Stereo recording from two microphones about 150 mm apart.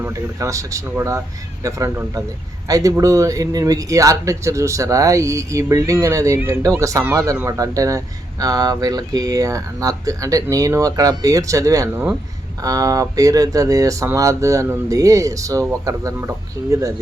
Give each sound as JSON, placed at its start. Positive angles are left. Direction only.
{"t": 0.0, "sound": "speech", "side_deg": -20}